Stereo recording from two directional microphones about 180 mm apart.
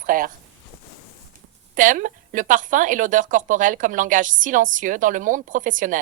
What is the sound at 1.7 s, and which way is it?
Speech, 45° right (ahead or behind).